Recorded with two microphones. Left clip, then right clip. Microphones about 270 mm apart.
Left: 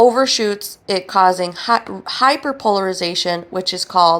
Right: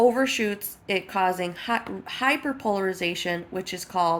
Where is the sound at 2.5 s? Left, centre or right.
Left.